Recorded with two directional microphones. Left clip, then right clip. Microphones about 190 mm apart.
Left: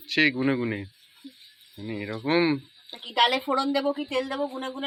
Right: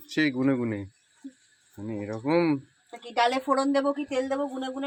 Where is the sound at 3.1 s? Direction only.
35° right (ahead or behind).